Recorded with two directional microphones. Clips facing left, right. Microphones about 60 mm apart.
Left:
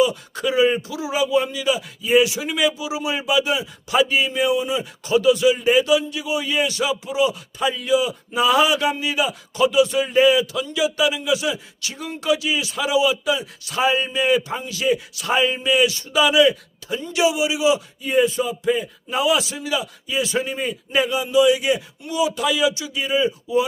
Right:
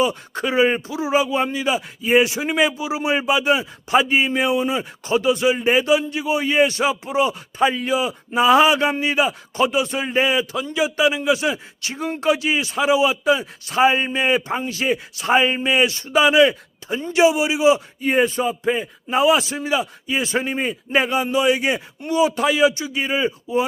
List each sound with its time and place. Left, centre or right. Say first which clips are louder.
0.0 s speech: left 1 dB; right